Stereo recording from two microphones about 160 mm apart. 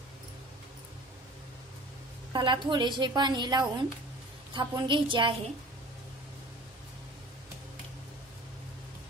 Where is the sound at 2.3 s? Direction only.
30° right (ahead or behind).